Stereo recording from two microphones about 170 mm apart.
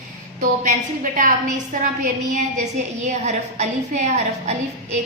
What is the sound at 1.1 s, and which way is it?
Speech, 50° right (ahead or behind).